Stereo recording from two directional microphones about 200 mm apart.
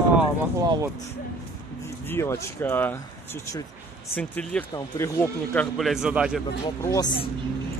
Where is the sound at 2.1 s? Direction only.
10° left (ahead or behind).